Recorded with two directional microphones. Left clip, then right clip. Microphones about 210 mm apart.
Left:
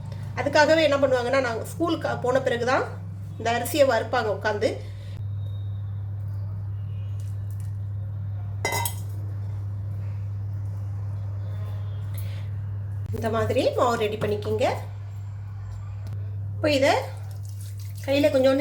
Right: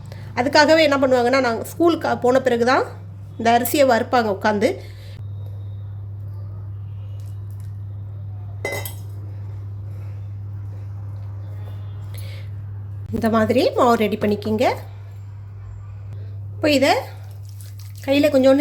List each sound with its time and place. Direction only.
0.3 s a woman's voice: 55° right (ahead or behind)
13.2 s a woman's voice: 55° right (ahead or behind)
16.6 s a woman's voice: 55° right (ahead or behind)
18.0 s a woman's voice: 55° right (ahead or behind)